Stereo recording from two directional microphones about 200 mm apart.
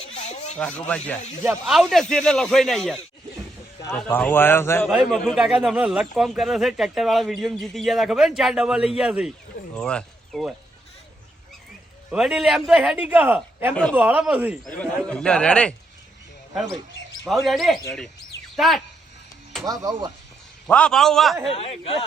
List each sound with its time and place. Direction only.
0.0 s rub: 30° left (ahead or behind)
0.5 s a man's voice: 5° left (ahead or behind)
4.9 s speech: centre (ahead or behind)
12.1 s speech: 5° right (ahead or behind)
14.8 s speech: 5° left (ahead or behind)
17.2 s speech: centre (ahead or behind)
19.6 s speech: 20° right (ahead or behind)
20.7 s speech: 5° left (ahead or behind)
21.5 s speech: 30° left (ahead or behind)